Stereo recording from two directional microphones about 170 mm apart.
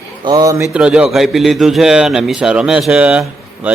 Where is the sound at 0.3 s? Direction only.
20° right (ahead or behind).